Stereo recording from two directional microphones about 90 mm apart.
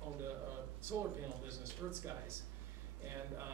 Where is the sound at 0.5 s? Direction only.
25° right (ahead or behind).